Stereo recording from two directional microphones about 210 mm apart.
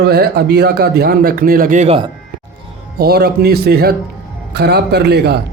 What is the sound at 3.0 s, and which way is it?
A man's voice, 50° right (ahead or behind).